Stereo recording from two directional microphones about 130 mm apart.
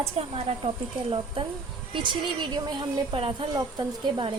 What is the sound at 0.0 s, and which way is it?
Speech, 50° right (ahead or behind).